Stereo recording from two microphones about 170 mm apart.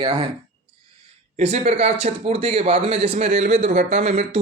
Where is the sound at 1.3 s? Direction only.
40° right (ahead or behind).